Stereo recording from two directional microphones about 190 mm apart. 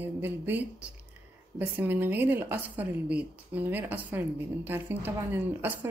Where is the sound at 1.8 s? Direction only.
10° right (ahead or behind).